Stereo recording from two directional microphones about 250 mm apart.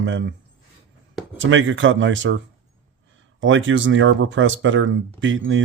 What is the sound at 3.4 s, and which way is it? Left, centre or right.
Speech, right.